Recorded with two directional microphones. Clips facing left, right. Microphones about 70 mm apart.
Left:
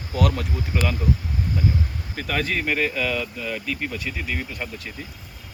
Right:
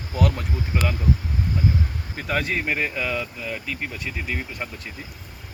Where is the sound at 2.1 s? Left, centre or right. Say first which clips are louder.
Even; centre.